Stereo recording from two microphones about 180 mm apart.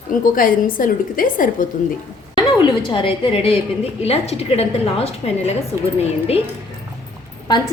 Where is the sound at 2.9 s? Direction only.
30° left (ahead or behind).